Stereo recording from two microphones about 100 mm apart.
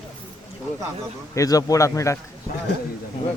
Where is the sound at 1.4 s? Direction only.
35° left (ahead or behind).